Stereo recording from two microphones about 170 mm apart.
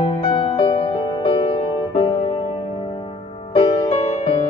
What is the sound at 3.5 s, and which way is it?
Music, 25° left (ahead or behind).